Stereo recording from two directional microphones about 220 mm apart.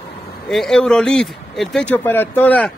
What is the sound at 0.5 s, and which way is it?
Speech, centre (ahead or behind).